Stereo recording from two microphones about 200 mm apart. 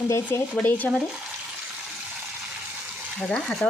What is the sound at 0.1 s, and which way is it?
Speech, 10° left (ahead or behind).